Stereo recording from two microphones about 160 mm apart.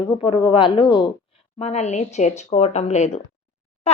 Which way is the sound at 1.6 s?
45° left (ahead or behind).